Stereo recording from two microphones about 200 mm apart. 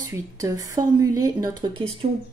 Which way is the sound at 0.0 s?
15° right (ahead or behind).